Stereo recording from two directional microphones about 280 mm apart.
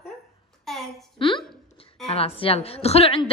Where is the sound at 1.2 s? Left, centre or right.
Centre.